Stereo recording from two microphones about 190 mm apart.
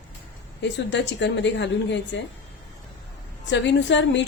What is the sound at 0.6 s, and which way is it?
A woman's voice, 70° left (ahead or behind).